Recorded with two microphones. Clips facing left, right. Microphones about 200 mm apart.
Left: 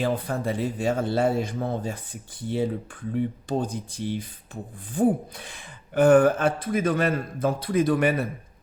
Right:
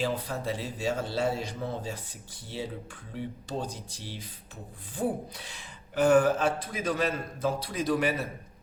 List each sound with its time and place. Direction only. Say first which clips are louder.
0.0 s speech: left 5 dB; 55° left (ahead or behind)